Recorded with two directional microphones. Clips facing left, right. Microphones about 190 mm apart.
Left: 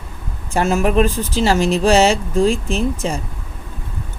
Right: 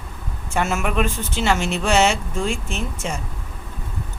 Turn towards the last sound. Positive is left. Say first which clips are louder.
# left 8 dB
turn(degrees=35)  # may be behind; listen again after turning